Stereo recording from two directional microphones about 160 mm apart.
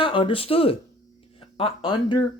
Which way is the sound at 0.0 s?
35° left (ahead or behind).